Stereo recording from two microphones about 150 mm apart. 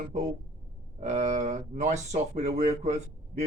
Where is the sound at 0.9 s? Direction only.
50° right (ahead or behind).